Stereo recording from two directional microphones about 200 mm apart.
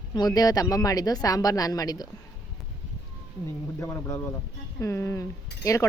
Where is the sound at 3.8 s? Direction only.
15° left (ahead or behind).